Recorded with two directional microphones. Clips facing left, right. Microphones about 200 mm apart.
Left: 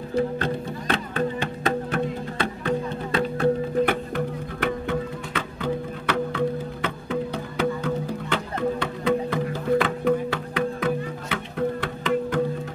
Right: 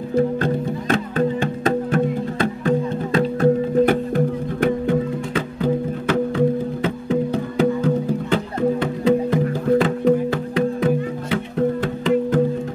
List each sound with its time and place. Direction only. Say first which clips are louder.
0.1 s music: right 5 dB; 45° right (ahead or behind)
5.3 s music: right 6 dB; 40° right (ahead or behind)
8.5 s music: right 5 dB; 25° right (ahead or behind)
9.5 s music: right 3 dB; 40° right (ahead or behind)